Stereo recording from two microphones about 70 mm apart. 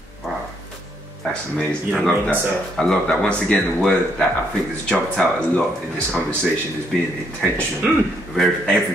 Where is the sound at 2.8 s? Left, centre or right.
Centre.